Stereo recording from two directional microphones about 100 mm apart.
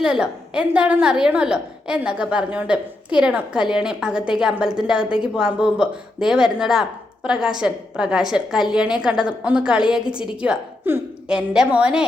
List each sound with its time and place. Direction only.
0.0 s a woman's voice: 10° right (ahead or behind)
10.8 s speech: 20° right (ahead or behind)
11.3 s a woman's voice: 5° right (ahead or behind)